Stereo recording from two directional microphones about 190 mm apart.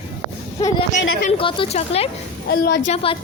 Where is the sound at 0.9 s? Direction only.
40° left (ahead or behind).